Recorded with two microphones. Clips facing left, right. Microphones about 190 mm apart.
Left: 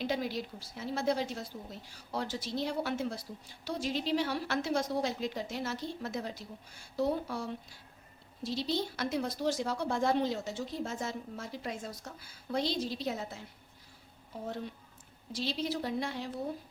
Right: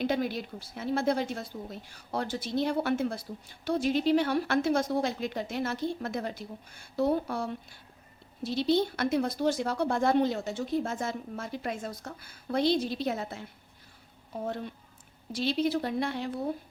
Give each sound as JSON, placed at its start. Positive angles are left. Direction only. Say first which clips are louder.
{"t": 0.0, "sound": "speech", "louder": "right 4 dB", "side_deg": -55}
{"t": 15.3, "sound": "speech", "louder": "right 7 dB", "side_deg": -60}